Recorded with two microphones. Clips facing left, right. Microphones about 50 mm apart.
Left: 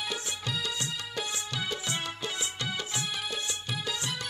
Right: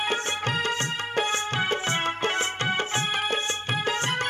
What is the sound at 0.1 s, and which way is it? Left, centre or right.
Music, right.